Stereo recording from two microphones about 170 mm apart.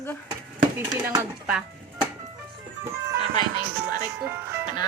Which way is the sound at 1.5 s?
5° right (ahead or behind).